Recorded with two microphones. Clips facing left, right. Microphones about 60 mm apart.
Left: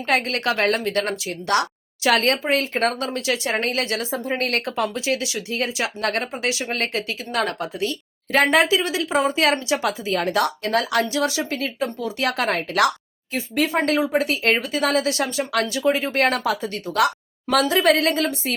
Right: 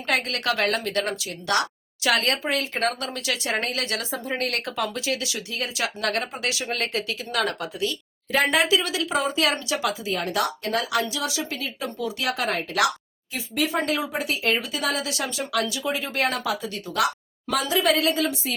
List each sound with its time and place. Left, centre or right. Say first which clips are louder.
0.1 s speech: left 3 dB; left
8.7 s speech: left 3 dB; left
12.2 s speech: left 5 dB; left
13.3 s speech: left 4 dB; left
14.2 s speech: left 4 dB; left